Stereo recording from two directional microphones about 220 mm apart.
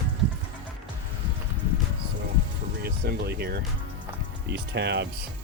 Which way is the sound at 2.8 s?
45° right (ahead or behind).